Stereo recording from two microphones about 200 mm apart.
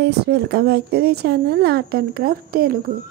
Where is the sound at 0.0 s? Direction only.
55° right (ahead or behind).